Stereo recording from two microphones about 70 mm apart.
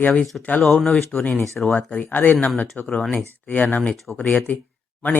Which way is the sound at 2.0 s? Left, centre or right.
Left.